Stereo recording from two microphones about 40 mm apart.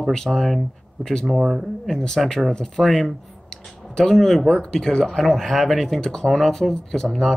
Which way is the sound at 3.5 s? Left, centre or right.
Centre.